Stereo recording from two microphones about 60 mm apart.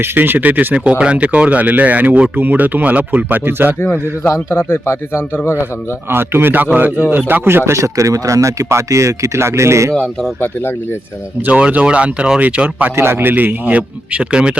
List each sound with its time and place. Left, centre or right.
0.0 s speech: right
2.3 s speech: right
4.2 s a man's voice: left
6.1 s a man's voice: right
9.9 s speech: centre
10.4 s a man's voice: left
11.4 s speech: right
13.0 s speech: right; by 14.6 s centre